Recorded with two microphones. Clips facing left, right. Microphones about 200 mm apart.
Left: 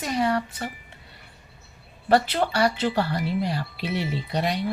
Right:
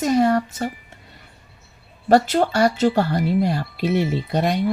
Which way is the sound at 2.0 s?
45° right (ahead or behind).